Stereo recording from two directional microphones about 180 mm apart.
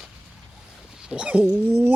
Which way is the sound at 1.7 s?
15° right (ahead or behind).